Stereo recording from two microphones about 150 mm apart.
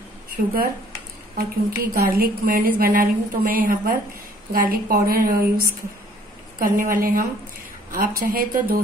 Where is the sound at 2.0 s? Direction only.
80° right.